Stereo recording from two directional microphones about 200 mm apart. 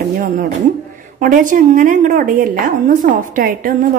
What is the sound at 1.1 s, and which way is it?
A woman's voice, 40° right (ahead or behind).